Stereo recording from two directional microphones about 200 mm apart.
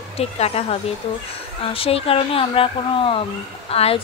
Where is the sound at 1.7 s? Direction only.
30° left (ahead or behind).